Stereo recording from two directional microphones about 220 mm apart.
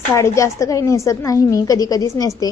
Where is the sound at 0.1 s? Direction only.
15° left (ahead or behind).